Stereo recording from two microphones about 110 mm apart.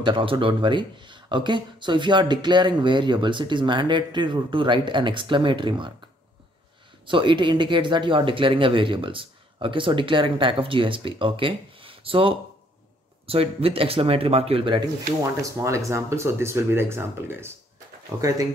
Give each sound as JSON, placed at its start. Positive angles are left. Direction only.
{"t": 0.0, "sound": "speech", "side_deg": -50}
{"t": 7.1, "sound": "speech", "side_deg": -50}
{"t": 15.4, "sound": "speech", "side_deg": -30}